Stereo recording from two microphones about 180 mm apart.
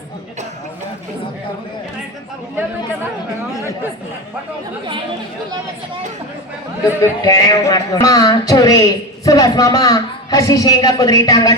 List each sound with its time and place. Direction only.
7.0 s speech: 20° left (ahead or behind)